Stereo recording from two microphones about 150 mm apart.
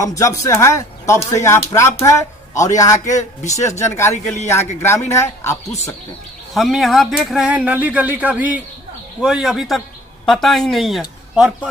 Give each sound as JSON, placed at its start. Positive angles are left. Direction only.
{"t": 0.0, "sound": "speech", "side_deg": 20}
{"t": 6.5, "sound": "speech", "side_deg": 0}